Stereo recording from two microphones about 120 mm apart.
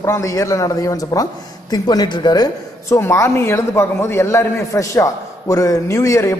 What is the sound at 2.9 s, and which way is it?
A man's voice, 20° left (ahead or behind).